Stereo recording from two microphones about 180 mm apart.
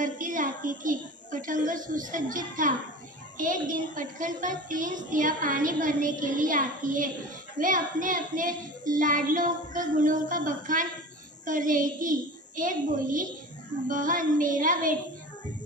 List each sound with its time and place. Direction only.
0.0 s a woman's voice: 45° right (ahead or behind)